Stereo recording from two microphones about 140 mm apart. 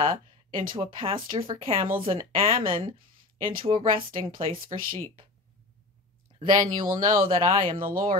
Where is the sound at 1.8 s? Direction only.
80° right.